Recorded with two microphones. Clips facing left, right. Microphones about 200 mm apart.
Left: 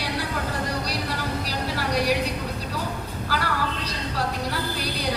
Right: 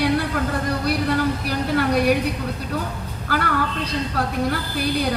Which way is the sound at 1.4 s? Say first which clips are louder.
Right 7 dB; 55° right (ahead or behind).